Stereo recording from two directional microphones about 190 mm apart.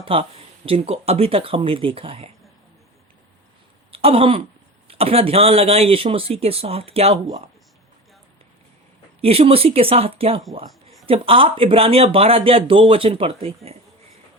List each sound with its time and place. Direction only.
0.0 s speech: 30° right (ahead or behind)
3.9 s speech: 30° right (ahead or behind)
9.2 s speech: 30° right (ahead or behind)